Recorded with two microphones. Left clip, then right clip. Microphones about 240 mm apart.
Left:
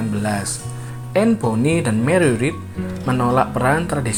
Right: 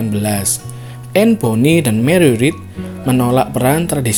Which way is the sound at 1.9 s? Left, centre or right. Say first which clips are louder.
Right 4 dB; right.